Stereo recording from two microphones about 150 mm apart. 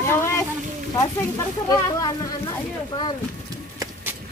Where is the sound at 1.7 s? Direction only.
25° left (ahead or behind).